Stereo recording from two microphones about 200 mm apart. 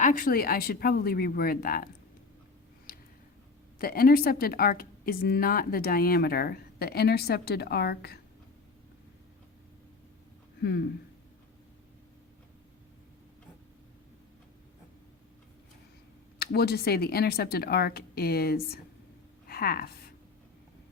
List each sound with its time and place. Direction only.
0.0 s a woman's voice: 40° left (ahead or behind)
2.9 s a sound: 45° left (ahead or behind)
3.8 s a woman's voice: 45° left (ahead or behind)
10.6 s speech: 55° left (ahead or behind)
16.4 s a woman's voice: 50° left (ahead or behind)
19.5 s a sound: 50° left (ahead or behind)